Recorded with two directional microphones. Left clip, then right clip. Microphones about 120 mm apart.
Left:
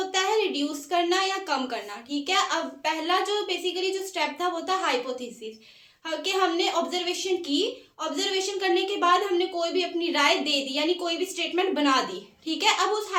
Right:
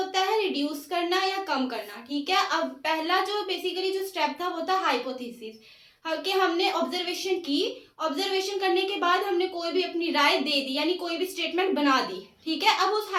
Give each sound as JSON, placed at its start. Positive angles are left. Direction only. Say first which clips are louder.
{"t": 0.1, "sound": "a woman's voice", "louder": "left 2 dB", "side_deg": 50}
{"t": 6.1, "sound": "a woman's voice", "louder": "even", "side_deg": 40}